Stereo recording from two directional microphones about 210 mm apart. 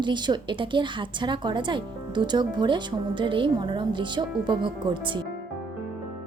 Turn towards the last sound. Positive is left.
turn(degrees=-20)  # may be behind; listen again after turning